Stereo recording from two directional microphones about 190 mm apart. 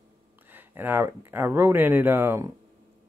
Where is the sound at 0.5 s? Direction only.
10° right (ahead or behind).